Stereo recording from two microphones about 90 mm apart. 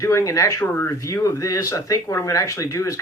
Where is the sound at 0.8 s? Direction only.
35° left (ahead or behind).